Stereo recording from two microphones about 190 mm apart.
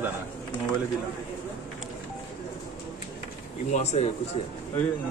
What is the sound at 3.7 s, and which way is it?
Speech, 35° left (ahead or behind).